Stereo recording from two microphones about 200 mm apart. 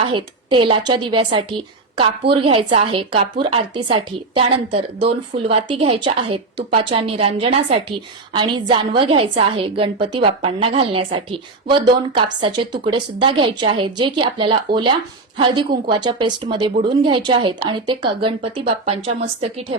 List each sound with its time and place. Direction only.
0.0 s a woman's voice: 25° right (ahead or behind)